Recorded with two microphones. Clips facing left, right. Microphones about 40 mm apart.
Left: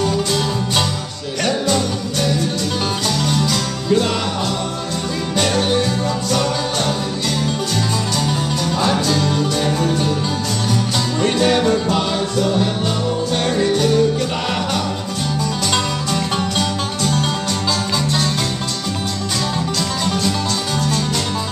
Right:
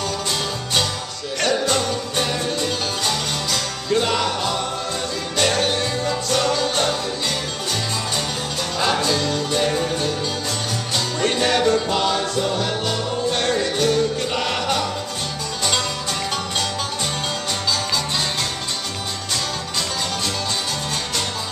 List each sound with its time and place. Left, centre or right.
3.3 s music: centre
5.4 s music: centre
8.8 s music: centre
9.1 s music: centre
11.4 s music: centre
13.5 s music: centre
15.7 s music: centre